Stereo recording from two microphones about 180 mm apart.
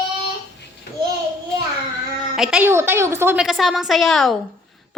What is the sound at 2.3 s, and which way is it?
A woman's voice, 5° right (ahead or behind).